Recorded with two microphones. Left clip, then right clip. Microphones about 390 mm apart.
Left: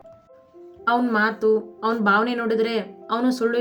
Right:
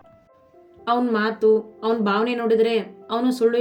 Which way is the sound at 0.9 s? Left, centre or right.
Centre.